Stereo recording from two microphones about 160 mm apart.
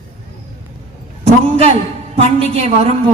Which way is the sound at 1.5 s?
40° right (ahead or behind).